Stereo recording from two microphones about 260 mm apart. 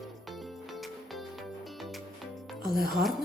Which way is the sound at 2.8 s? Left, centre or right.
Centre.